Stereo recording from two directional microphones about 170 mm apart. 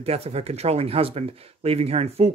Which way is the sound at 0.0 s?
35° right (ahead or behind).